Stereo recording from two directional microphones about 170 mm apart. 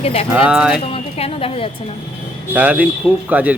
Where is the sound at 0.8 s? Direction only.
35° left (ahead or behind).